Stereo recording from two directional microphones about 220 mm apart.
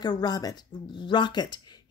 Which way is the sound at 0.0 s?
20° left (ahead or behind).